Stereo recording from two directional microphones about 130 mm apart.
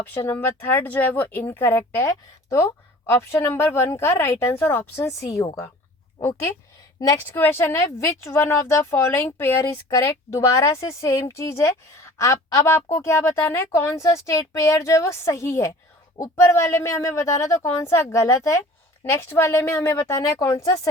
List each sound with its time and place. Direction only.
0.0 s speech: 15° left (ahead or behind)
7.3 s speech: 15° left (ahead or behind)